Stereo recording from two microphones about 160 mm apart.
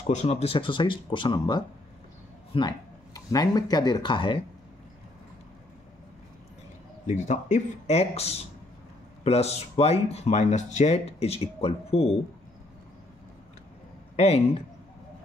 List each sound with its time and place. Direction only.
0.0 s speech: 45° left (ahead or behind)
7.1 s speech: 45° left (ahead or behind)
14.1 s speech: 40° left (ahead or behind)